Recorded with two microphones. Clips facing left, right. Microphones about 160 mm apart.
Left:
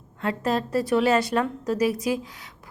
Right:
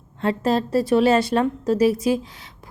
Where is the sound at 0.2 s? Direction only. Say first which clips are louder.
Right 4 dB; 30° right (ahead or behind).